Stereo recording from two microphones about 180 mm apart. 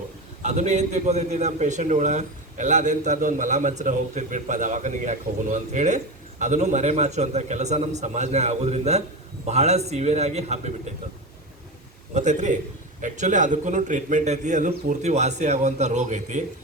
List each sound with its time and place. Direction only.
0.4 s a man's voice: 40° right (ahead or behind)
12.1 s a man's voice: 40° right (ahead or behind)